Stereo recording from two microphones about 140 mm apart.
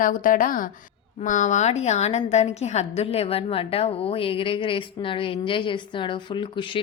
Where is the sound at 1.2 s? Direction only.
60° left (ahead or behind).